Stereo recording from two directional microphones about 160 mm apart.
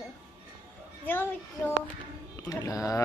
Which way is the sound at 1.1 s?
10° left (ahead or behind).